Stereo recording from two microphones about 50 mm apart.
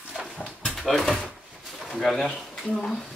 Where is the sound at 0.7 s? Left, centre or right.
Centre.